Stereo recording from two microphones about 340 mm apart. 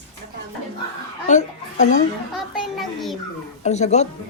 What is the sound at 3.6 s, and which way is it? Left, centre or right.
Speech, centre.